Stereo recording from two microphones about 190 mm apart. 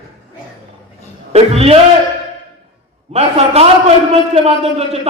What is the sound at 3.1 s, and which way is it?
A man's voice, 35° right (ahead or behind).